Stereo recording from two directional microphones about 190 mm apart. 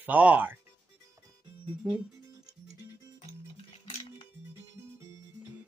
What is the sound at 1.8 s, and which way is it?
Speech, 5° right (ahead or behind).